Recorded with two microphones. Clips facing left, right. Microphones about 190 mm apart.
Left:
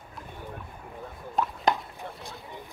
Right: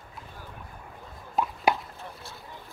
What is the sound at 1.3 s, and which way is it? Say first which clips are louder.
Plop: right 1 dB; centre (ahead or behind).